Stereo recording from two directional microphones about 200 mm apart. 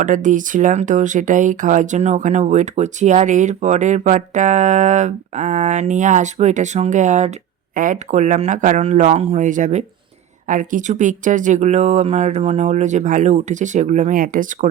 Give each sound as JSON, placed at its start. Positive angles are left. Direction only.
{"t": 0.0, "sound": "speech", "side_deg": -40}